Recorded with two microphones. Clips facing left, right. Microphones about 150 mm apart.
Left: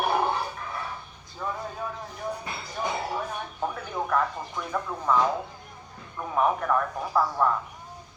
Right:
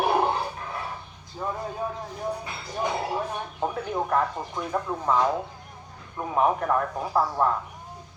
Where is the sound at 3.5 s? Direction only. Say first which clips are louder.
Right 4 dB; 20° right (ahead or behind).